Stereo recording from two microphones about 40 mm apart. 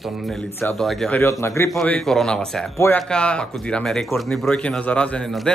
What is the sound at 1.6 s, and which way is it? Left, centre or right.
Speech, left.